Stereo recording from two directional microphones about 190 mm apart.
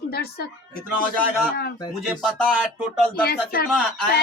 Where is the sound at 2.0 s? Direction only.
Centre (ahead or behind).